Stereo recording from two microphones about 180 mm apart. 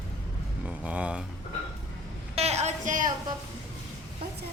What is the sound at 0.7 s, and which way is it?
Speech, 5° right (ahead or behind).